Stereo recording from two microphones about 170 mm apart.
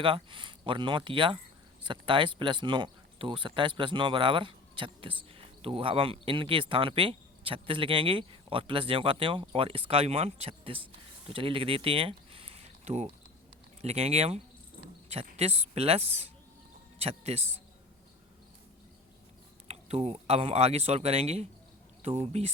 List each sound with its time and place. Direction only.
0.0 s speech: 30° right (ahead or behind)
19.6 s speech: 40° right (ahead or behind)